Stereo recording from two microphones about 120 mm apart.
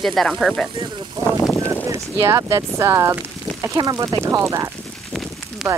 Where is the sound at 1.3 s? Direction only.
25° left (ahead or behind).